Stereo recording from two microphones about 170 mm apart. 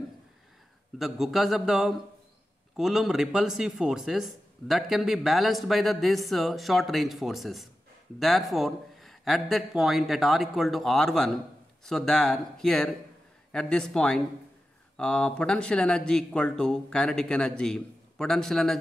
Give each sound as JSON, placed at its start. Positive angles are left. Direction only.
{"t": 0.9, "sound": "speech", "side_deg": 0}